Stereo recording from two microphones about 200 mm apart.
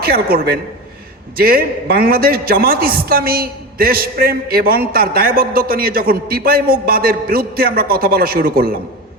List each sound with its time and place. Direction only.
0.0 s speech: 50° right (ahead or behind)